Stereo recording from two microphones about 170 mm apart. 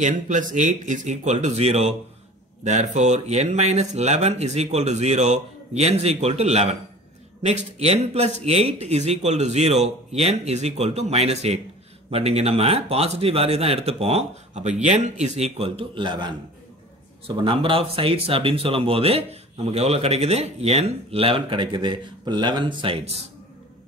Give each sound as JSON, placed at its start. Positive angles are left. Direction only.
{"t": 0.0, "sound": "speech", "side_deg": -50}
{"t": 17.4, "sound": "speech", "side_deg": -30}